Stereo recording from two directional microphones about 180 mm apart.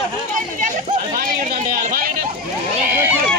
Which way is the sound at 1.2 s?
50° right (ahead or behind).